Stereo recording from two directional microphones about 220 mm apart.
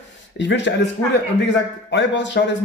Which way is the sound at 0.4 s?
55° left (ahead or behind).